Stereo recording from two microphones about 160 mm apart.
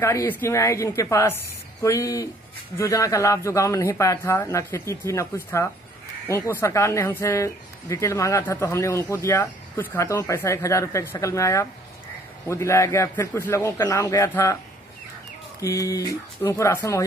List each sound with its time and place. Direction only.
0.0 s speech: 15° left (ahead or behind)
15.6 s speech: 20° left (ahead or behind)